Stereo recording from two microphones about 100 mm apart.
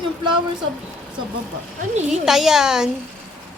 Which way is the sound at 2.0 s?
5° right (ahead or behind).